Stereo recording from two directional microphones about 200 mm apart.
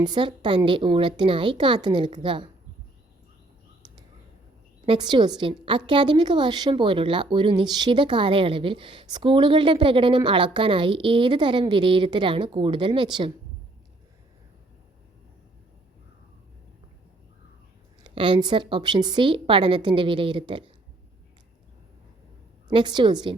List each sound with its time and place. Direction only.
0.0 s a woman's voice: 20° right (ahead or behind)
4.9 s a woman's voice: 25° right (ahead or behind)
18.0 s a woman's voice: 25° right (ahead or behind)
22.7 s a woman's voice: 20° right (ahead or behind)